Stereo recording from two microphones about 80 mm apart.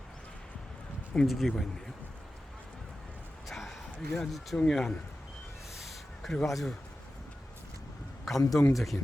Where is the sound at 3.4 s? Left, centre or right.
Centre.